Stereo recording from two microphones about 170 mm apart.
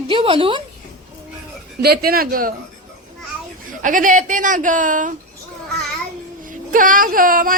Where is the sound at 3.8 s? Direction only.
50° right (ahead or behind).